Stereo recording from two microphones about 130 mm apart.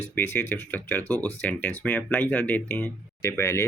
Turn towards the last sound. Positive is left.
turn(degrees=20)  # may be behind; listen again after turning